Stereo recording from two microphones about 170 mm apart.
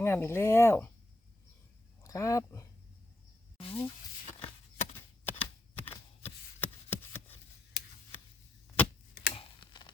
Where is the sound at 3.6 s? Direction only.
30° left (ahead or behind).